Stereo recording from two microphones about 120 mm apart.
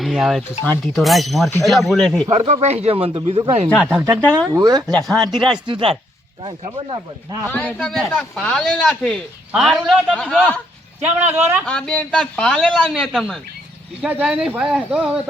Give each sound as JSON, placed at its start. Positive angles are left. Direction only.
{"t": 0.0, "sound": "a man's voice", "side_deg": 0}
{"t": 2.3, "sound": "speech", "side_deg": -65}
{"t": 3.8, "sound": "speech", "side_deg": -15}
{"t": 4.6, "sound": "speech", "side_deg": -35}
{"t": 5.0, "sound": "a man's voice", "side_deg": 0}
{"t": 5.5, "sound": "speech", "side_deg": -45}
{"t": 7.4, "sound": "a man's voice", "side_deg": 10}
{"t": 11.0, "sound": "speech", "side_deg": -15}
{"t": 11.6, "sound": "speech", "side_deg": 5}